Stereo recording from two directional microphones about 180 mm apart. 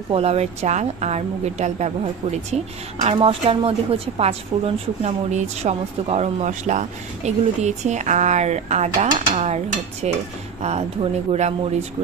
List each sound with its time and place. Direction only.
0.1 s a woman's voice: 35° right (ahead or behind)
3.0 s a woman's voice: 30° right (ahead or behind)